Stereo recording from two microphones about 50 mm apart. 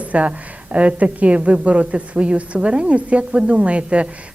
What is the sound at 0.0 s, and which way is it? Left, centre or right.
A woman's voice, right.